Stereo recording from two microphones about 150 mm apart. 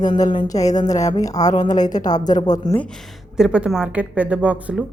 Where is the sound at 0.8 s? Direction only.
25° left (ahead or behind).